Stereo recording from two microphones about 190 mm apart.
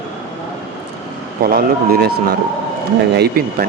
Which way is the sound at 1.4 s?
55° right (ahead or behind).